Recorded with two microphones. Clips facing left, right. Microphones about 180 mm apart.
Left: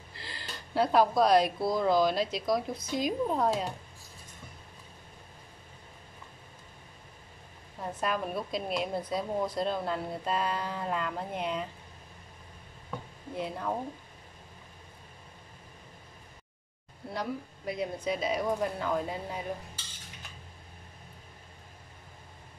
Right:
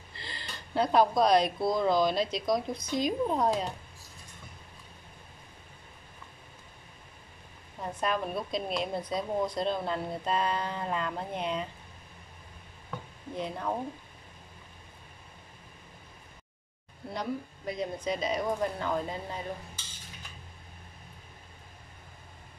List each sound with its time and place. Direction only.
0.1 s a woman's voice: 5° left (ahead or behind)
7.9 s a woman's voice: 5° left (ahead or behind)
13.4 s a woman's voice: centre (ahead or behind)
17.1 s a woman's voice: 5° left (ahead or behind)